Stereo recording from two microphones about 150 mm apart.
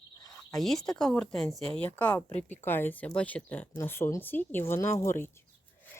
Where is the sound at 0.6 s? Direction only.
Centre (ahead or behind).